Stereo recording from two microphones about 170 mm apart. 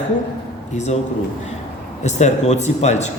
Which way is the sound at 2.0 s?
40° left (ahead or behind).